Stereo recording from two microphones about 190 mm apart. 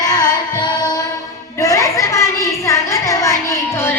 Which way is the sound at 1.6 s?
15° left (ahead or behind).